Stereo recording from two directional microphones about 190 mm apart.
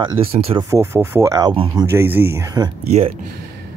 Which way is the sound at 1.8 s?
10° right (ahead or behind).